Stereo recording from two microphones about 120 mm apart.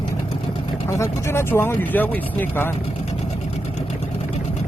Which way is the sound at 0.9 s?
25° left (ahead or behind).